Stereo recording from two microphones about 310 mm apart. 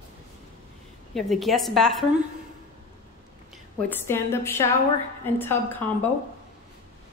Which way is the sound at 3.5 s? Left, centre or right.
Centre.